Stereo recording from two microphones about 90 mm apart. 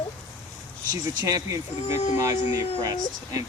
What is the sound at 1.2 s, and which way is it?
Speech, 40° right (ahead or behind).